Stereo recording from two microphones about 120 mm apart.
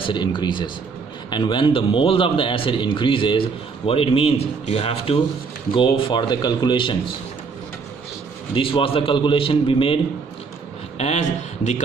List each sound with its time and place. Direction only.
0.0 s a man's voice: 40° left (ahead or behind)
8.5 s a man's voice: 45° left (ahead or behind)
11.0 s a man's voice: 70° left (ahead or behind)